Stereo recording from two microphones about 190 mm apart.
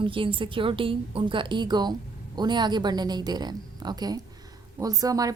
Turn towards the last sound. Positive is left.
turn(degrees=-20)  # may be behind; listen again after turning